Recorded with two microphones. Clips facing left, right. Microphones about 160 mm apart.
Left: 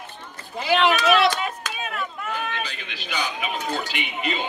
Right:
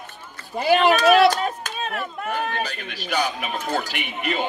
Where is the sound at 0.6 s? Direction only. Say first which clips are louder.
Right 3 dB; 45° right (ahead or behind).